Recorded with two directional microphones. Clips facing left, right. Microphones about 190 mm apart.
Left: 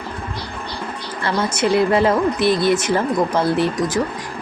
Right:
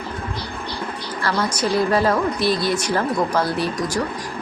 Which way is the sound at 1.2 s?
25° left (ahead or behind).